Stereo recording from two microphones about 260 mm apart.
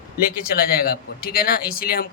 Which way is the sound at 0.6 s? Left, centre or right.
Left.